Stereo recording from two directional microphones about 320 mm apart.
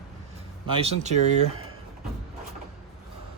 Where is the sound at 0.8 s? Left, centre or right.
Right.